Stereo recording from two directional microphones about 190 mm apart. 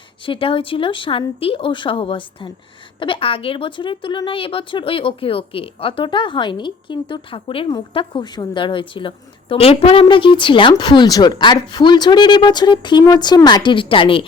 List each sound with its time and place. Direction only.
0.3 s a woman's voice: 30° left (ahead or behind)